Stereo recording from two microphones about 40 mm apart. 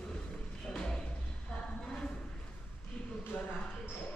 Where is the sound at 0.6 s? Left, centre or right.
Centre.